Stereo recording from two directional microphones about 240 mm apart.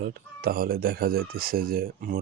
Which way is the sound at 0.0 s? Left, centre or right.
Right.